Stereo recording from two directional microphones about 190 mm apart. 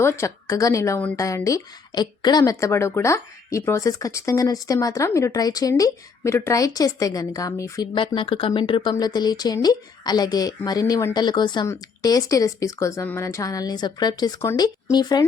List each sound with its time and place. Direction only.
0.0 s a woman's voice: 15° left (ahead or behind)